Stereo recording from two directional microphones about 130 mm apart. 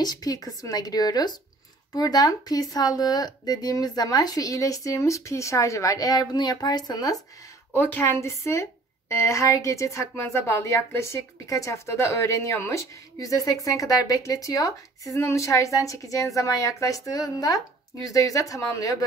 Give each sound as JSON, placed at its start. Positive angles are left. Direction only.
{"t": 0.0, "sound": "a woman's voice", "side_deg": 30}
{"t": 7.7, "sound": "a woman's voice", "side_deg": 15}